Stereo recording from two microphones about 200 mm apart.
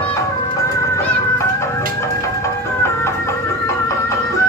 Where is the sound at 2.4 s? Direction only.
15° left (ahead or behind).